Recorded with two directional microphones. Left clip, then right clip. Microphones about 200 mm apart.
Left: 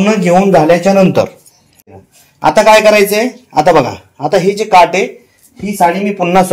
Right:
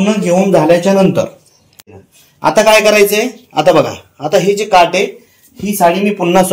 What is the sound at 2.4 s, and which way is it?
Speech, 45° left (ahead or behind).